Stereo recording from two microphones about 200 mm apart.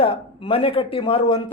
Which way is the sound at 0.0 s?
30° left (ahead or behind).